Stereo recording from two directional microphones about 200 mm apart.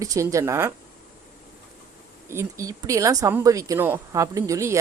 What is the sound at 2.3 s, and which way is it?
Speech, 15° right (ahead or behind).